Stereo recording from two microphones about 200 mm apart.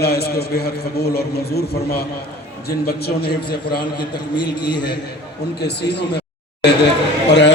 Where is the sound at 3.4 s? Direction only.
25° left (ahead or behind).